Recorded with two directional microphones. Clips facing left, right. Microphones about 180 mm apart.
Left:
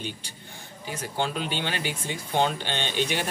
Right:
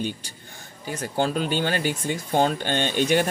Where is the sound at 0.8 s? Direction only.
45° right (ahead or behind).